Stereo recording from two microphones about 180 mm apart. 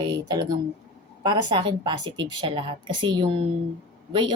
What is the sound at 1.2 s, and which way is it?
Speech, 25° right (ahead or behind).